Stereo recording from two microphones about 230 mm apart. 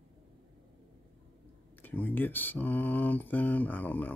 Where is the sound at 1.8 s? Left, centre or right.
Centre.